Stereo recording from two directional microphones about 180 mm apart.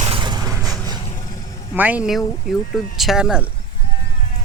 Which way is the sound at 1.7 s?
10° right (ahead or behind).